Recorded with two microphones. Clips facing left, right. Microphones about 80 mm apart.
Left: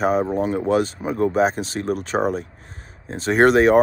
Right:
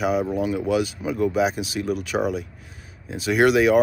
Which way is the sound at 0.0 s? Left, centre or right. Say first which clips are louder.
Left 3 dB; left.